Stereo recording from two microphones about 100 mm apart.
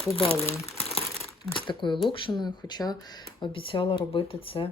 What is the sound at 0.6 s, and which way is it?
Crumpling, 90° left.